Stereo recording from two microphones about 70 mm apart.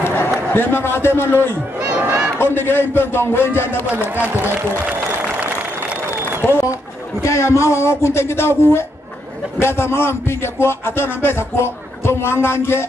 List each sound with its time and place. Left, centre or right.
0.0 s a sound: left
0.5 s speech: left
1.8 s a sound: right
2.3 s speech: left
4.0 s speech: right
7.2 s speech: left